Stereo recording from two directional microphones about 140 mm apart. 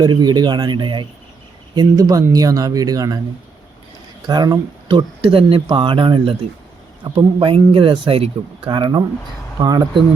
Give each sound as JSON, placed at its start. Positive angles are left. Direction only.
{"t": 0.0, "sound": "speech", "side_deg": -30}
{"t": 4.3, "sound": "speech", "side_deg": -30}